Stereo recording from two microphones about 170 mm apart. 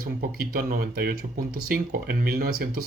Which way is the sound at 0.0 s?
60° right (ahead or behind).